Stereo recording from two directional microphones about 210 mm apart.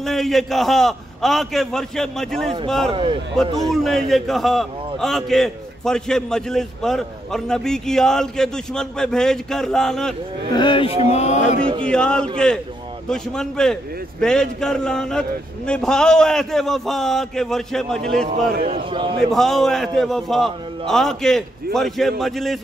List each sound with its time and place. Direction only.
0.0 s a man's voice: centre (ahead or behind)
2.9 s a man's voice: 25° right (ahead or behind)
3.7 s a man's voice: centre (ahead or behind)
10.5 s speech: 25° left (ahead or behind)
11.1 s mantra: 30° left (ahead or behind)
11.8 s a man's voice: 5° left (ahead or behind)
18.5 s a man's voice: 45° right (ahead or behind)
18.9 s a man's voice: 25° right (ahead or behind)
19.1 s a man's voice: centre (ahead or behind)